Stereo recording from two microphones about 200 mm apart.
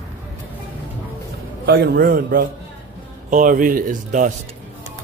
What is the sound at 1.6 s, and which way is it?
A man's voice, 50° right (ahead or behind).